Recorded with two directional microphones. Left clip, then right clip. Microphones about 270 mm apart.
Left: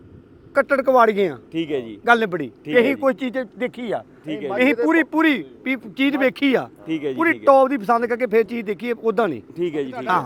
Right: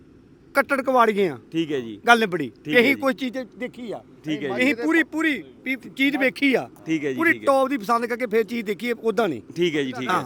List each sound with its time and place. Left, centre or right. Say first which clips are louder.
0.5 s a man's voice: left 3 dB; centre
3.3 s speech: left 6 dB; centre
3.8 s speech: left 8 dB; centre
4.3 s speech: even; right
4.5 s speech: left 4 dB; centre
5.1 s a man's voice: left 5 dB; left
6.0 s speech: left 1 dB; centre
6.8 s a man's voice: even; right
7.4 s speech: left 5 dB; centre
9.6 s speech: right 2 dB; right